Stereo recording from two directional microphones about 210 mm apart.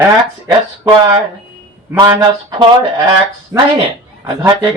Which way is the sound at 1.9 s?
15° right (ahead or behind).